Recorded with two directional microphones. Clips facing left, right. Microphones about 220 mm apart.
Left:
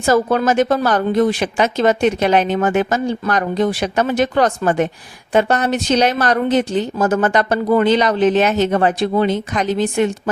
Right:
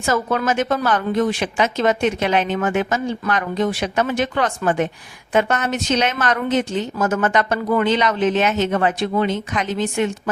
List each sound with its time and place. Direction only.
0.0 s speech: 35° left (ahead or behind)